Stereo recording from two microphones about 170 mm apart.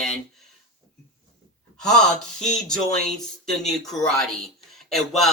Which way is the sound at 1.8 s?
5° left (ahead or behind).